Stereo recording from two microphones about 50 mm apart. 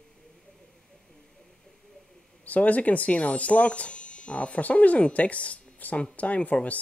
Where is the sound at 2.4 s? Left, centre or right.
Left.